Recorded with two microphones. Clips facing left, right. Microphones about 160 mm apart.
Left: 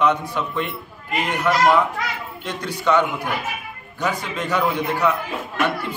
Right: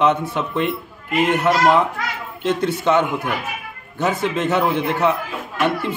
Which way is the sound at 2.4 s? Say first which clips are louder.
Right 5 dB; 25° right (ahead or behind).